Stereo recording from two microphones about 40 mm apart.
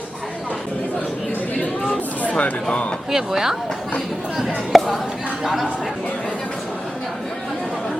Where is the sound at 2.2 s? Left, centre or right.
Left.